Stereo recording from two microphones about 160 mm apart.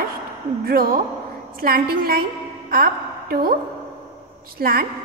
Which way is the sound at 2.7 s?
65° right (ahead or behind).